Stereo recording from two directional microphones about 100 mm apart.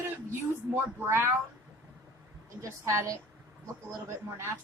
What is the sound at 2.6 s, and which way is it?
Speech, 30° right (ahead or behind).